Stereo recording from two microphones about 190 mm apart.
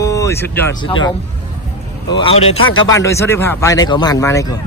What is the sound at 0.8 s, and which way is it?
Speech, 25° left (ahead or behind).